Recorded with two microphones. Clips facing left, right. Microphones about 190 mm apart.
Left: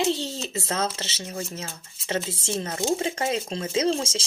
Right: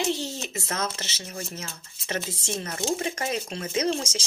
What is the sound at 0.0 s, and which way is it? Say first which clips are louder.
Speech: left 3 dB; 30° left (ahead or behind).